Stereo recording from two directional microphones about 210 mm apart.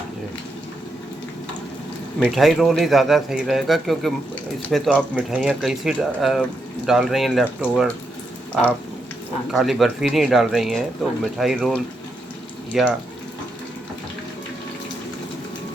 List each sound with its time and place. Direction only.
2.1 s speech: centre (ahead or behind)
9.5 s speech: centre (ahead or behind)